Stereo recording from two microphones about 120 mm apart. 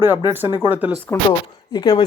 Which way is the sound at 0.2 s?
20° right (ahead or behind).